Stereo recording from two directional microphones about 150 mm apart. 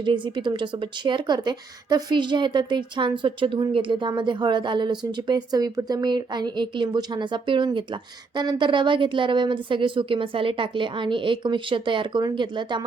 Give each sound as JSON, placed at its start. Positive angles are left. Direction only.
{"t": 0.0, "sound": "speech", "side_deg": -30}